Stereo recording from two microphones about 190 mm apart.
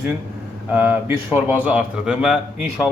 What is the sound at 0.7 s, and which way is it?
A man's voice, 10° right (ahead or behind).